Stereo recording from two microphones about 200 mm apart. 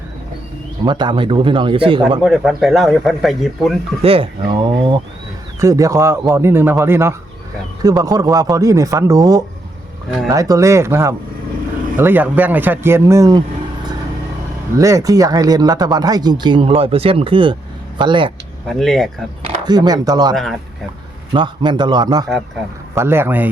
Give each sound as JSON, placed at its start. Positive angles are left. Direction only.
{"t": 0.9, "sound": "speech", "side_deg": -20}
{"t": 2.2, "sound": "speech", "side_deg": 0}
{"t": 4.0, "sound": "a man's voice", "side_deg": -25}
{"t": 14.8, "sound": "speech", "side_deg": -15}
{"t": 18.7, "sound": "speech", "side_deg": 0}
{"t": 19.5, "sound": "speech", "side_deg": -20}
{"t": 20.3, "sound": "speech", "side_deg": 0}
{"t": 21.3, "sound": "a man's voice", "side_deg": -20}